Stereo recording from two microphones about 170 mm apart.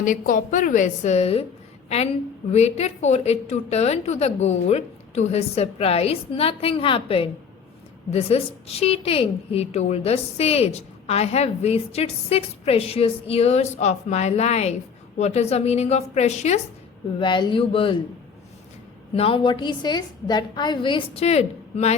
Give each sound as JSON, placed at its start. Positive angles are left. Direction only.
{"t": 0.0, "sound": "a woman's voice", "side_deg": 50}
{"t": 2.5, "sound": "a woman's voice", "side_deg": 40}
{"t": 17.2, "sound": "a woman's voice", "side_deg": 30}
{"t": 19.1, "sound": "a woman's voice", "side_deg": 35}